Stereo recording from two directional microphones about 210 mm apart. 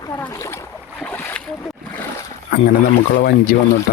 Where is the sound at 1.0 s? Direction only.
5° left (ahead or behind).